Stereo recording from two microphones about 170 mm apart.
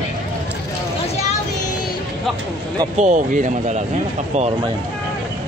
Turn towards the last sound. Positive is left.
turn(degrees=-45)  # may be behind; listen again after turning